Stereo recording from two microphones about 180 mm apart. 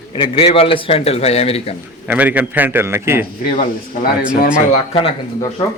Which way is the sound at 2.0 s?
10° right (ahead or behind).